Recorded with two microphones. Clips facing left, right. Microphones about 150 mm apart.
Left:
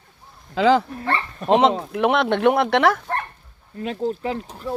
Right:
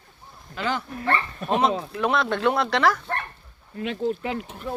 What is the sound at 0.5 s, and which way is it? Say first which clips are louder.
Speech: left 11 dB; 90° left.